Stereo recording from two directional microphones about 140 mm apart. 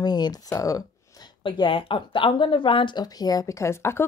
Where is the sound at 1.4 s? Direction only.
35° left (ahead or behind).